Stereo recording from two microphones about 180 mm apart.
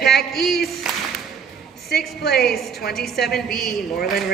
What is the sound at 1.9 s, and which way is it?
Speech, 60° left (ahead or behind).